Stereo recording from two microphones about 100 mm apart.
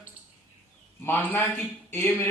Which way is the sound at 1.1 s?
20° left (ahead or behind).